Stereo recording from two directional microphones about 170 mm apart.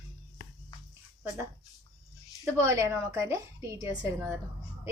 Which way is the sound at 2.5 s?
15° right (ahead or behind).